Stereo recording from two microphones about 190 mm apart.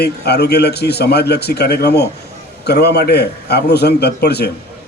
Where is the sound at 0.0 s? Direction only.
60° left (ahead or behind).